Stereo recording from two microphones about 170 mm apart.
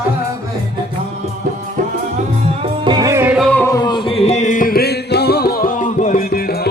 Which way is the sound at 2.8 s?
25° right (ahead or behind).